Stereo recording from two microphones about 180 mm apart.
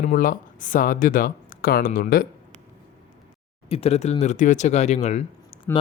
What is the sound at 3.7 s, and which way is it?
Speech, 35° left (ahead or behind).